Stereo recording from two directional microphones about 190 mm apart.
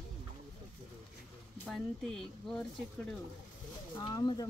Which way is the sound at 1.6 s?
Centre (ahead or behind).